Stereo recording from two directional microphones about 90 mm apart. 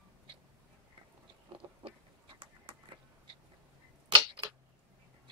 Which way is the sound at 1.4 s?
75° right (ahead or behind).